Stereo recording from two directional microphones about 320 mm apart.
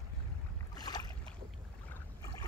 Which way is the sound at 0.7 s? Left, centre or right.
Centre.